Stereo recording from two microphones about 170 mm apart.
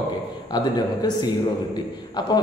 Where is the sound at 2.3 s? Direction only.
25° left (ahead or behind).